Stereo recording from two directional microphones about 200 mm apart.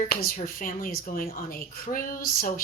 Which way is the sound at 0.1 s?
45° left (ahead or behind).